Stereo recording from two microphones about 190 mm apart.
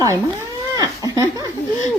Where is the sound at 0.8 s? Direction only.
20° right (ahead or behind).